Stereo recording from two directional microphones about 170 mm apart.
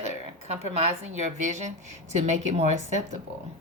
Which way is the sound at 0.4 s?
40° right (ahead or behind).